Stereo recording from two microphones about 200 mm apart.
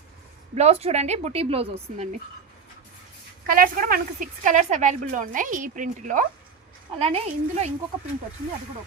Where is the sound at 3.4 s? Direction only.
45° right (ahead or behind).